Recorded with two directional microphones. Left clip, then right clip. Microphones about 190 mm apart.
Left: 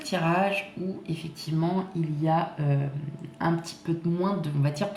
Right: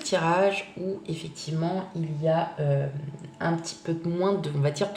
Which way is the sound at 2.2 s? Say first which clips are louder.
Right 2 dB; 15° right (ahead or behind).